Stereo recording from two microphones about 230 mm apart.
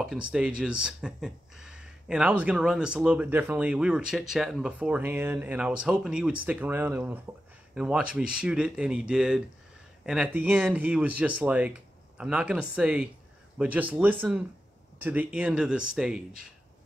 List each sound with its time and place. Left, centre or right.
0.0 s speech: centre